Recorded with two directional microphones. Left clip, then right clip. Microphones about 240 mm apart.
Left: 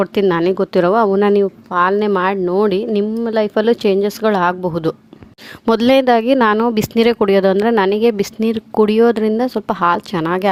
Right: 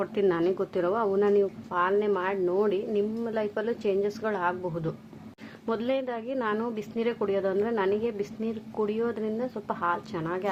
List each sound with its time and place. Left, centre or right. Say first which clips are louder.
0.0 s speech: left 11 dB; left